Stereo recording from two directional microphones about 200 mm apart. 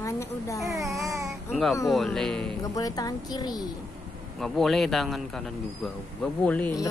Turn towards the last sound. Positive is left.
turn(degrees=5)  # may be behind; listen again after turning